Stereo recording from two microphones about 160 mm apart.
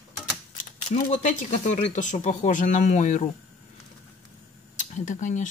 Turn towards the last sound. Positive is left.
turn(degrees=50)  # may be behind; listen again after turning